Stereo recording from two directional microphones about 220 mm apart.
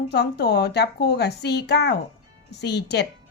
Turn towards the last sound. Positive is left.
turn(degrees=50)  # may be behind; listen again after turning